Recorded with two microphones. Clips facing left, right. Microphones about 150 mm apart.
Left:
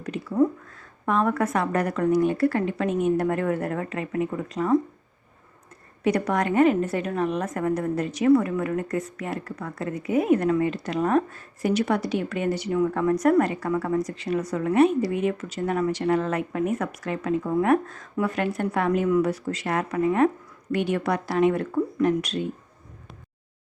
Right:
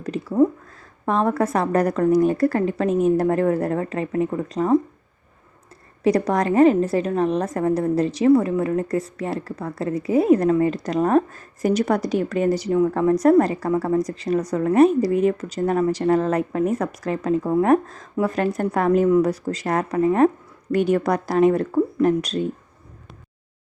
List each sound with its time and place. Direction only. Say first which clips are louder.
0.0 s a sound: right 4 dB; 35° right (ahead or behind)
0.8 s a woman's voice: right 2 dB; 35° right (ahead or behind)
6.0 s a woman's voice: right 4 dB; 35° right (ahead or behind)